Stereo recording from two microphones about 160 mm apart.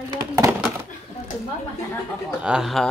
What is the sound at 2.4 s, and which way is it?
Speech, 5° right (ahead or behind).